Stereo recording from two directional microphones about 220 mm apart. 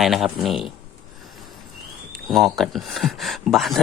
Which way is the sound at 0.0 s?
Centre (ahead or behind).